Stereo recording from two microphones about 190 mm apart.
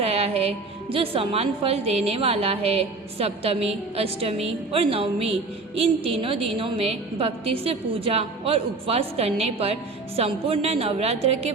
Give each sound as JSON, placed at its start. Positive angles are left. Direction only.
{"t": 0.0, "sound": "a woman's voice", "side_deg": -30}